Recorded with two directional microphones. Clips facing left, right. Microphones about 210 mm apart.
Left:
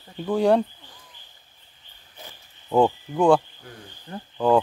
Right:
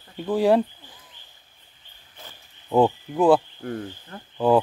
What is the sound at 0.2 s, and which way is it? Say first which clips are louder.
Speech: even; centre (ahead or behind).